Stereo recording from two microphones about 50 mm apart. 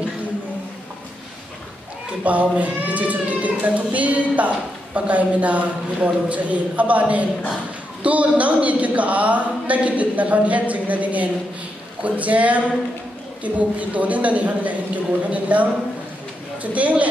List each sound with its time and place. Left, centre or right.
2.2 s a woman's voice: right
16.7 s a woman's voice: right